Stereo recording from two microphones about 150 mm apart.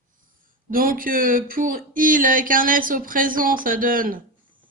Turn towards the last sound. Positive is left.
turn(degrees=-70)  # may be behind; listen again after turning